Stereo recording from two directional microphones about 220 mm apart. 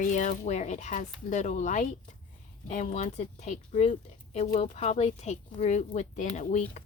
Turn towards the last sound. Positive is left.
turn(degrees=35)  # may be behind; listen again after turning